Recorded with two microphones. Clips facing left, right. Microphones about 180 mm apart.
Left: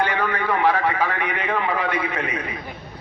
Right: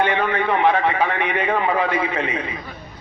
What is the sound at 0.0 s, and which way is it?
A man's voice, 20° right (ahead or behind).